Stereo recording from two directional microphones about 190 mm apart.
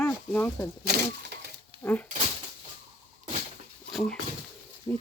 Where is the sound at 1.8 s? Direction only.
15° left (ahead or behind).